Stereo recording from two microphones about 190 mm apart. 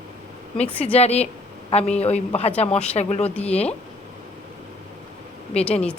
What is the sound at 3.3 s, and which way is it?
Speech, 5° left (ahead or behind).